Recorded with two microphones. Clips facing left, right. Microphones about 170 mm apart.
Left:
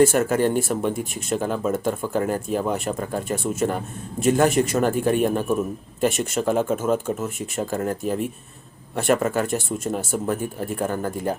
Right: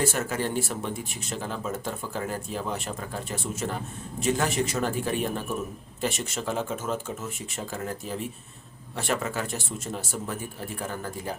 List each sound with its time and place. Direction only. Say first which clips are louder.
0.0 s speech: left 10 dB; 50° left (ahead or behind)